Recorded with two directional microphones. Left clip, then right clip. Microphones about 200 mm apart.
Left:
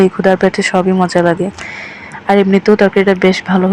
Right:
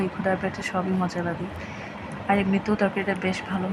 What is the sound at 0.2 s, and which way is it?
Speech, 30° left (ahead or behind).